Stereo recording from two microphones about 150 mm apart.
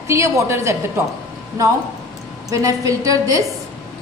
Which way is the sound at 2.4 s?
25° right (ahead or behind).